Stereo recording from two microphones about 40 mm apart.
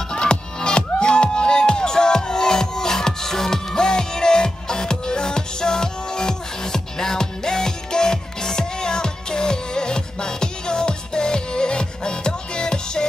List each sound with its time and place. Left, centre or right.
0.1 s music: left